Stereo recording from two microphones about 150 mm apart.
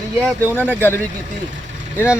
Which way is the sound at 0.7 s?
15° left (ahead or behind).